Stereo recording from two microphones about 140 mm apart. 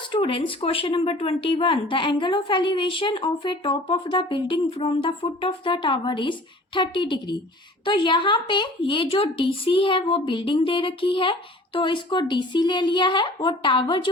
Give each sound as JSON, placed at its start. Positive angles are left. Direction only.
{"t": 0.1, "sound": "a woman's voice", "side_deg": 35}